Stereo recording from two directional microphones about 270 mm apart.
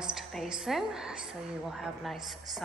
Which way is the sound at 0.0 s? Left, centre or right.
Centre.